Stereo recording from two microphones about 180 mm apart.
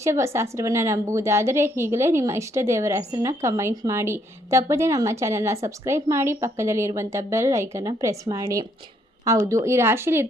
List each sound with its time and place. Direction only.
0.0 s a woman's voice: 15° right (ahead or behind)